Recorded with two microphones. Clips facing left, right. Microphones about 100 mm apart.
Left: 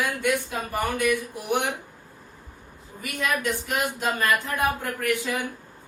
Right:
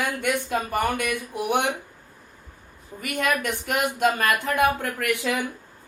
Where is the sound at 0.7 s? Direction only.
60° right (ahead or behind).